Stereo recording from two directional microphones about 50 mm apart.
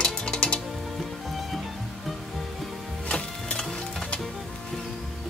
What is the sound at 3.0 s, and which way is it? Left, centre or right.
Music, centre.